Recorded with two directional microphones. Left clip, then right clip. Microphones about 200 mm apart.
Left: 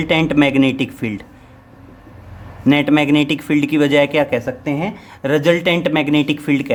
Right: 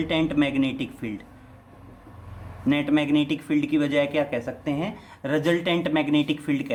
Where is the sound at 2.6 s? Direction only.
40° left (ahead or behind).